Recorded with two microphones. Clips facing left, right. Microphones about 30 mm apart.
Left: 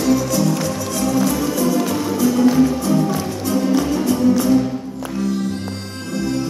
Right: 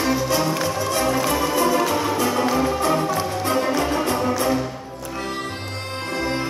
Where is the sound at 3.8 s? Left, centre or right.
Right.